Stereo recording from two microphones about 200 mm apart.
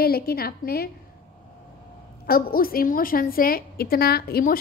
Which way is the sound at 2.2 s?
50° left (ahead or behind).